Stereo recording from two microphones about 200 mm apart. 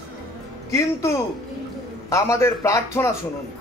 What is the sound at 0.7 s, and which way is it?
A man's voice, 15° left (ahead or behind).